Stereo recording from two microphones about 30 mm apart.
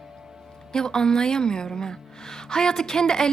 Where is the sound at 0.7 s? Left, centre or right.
Left.